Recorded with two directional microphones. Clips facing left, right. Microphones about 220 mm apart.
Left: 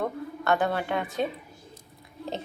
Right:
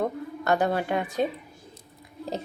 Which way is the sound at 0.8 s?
10° right (ahead or behind).